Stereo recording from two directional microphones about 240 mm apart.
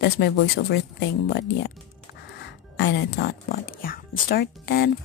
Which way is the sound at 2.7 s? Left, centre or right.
Left.